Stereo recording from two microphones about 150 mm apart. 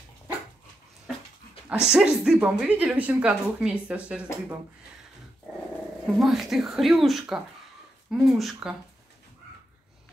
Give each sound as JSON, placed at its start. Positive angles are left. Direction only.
{"t": 1.9, "sound": "speech", "side_deg": -5}
{"t": 6.1, "sound": "speech", "side_deg": 0}